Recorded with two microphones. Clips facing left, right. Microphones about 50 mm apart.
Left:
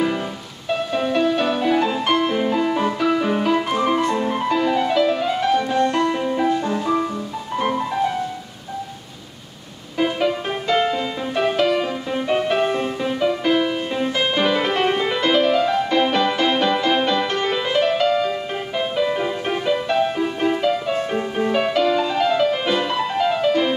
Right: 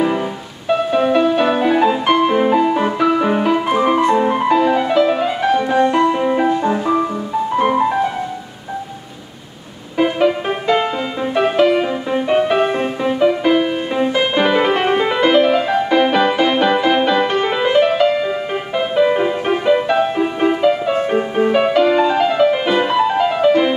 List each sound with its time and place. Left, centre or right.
0.7 s music: centre
9.9 s music: centre